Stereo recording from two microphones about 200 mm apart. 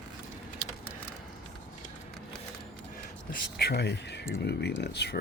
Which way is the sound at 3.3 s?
55° left (ahead or behind).